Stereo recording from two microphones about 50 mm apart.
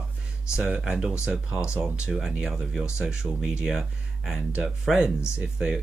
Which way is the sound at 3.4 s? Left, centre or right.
Centre.